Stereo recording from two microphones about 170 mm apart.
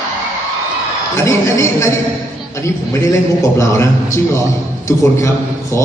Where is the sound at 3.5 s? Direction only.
15° left (ahead or behind).